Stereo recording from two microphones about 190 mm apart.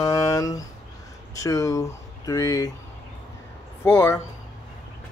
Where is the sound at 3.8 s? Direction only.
15° left (ahead or behind).